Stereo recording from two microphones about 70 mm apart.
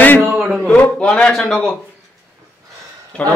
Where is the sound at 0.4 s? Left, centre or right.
Centre.